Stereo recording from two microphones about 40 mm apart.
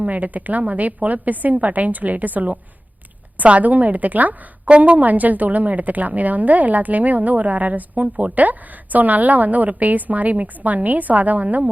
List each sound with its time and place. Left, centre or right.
0.0 s a woman's voice: right